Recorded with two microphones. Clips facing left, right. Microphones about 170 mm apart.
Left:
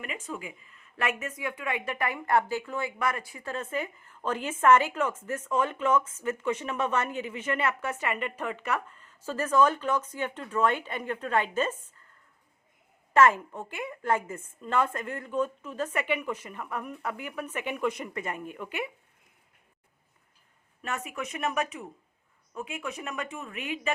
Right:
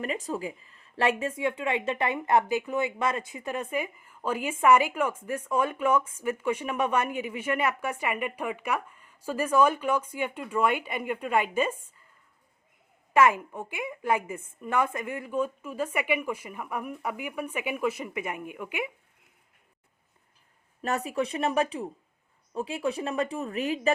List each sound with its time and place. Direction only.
0.0 s a woman's voice: 35° right (ahead or behind); by 12.0 s 10° right (ahead or behind)
13.1 s a woman's voice: 10° right (ahead or behind)
20.8 s speech: 35° right (ahead or behind)